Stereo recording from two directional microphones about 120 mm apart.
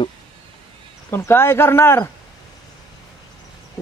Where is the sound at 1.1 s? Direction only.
20° left (ahead or behind).